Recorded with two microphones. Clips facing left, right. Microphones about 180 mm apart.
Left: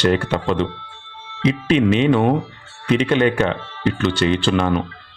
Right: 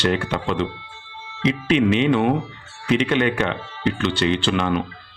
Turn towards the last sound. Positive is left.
turn(degrees=40)  # may be behind; listen again after turning